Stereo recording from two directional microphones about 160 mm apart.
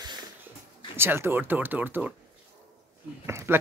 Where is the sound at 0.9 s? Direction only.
15° right (ahead or behind).